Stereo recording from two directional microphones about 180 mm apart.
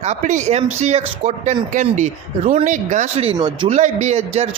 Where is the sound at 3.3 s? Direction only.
25° right (ahead or behind).